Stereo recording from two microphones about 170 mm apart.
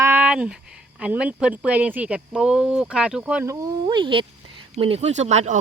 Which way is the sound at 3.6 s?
25° right (ahead or behind).